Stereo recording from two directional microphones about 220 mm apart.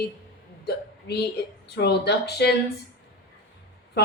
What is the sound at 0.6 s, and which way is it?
Hiccup, 45° left (ahead or behind).